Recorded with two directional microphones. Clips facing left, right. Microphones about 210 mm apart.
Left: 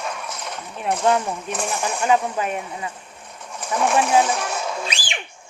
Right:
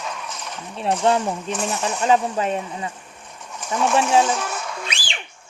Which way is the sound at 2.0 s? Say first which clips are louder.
Right 1 dB; 30° right (ahead or behind).